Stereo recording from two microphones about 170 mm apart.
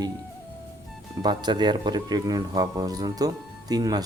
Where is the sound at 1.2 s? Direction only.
25° right (ahead or behind).